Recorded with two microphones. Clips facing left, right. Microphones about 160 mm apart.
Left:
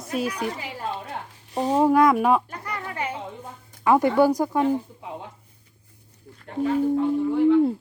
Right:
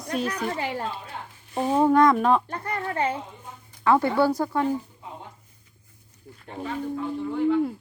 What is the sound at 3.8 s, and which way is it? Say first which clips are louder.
Speech: left 2 dB; 15° left (ahead or behind).